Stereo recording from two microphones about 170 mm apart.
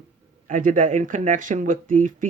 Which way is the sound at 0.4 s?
50° right (ahead or behind).